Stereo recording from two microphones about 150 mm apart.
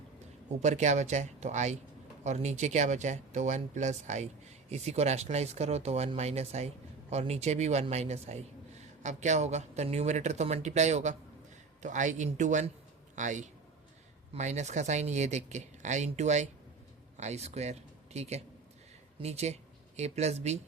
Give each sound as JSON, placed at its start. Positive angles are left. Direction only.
{"t": 0.6, "sound": "a man's voice", "side_deg": -50}